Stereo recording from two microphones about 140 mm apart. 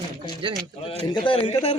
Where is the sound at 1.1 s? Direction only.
40° left (ahead or behind).